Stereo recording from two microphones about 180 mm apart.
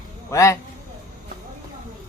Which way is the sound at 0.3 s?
15° left (ahead or behind).